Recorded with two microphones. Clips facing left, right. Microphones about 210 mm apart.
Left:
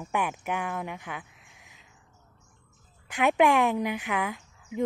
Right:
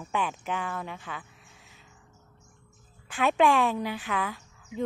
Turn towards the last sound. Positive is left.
turn(degrees=15)  # may be behind; listen again after turning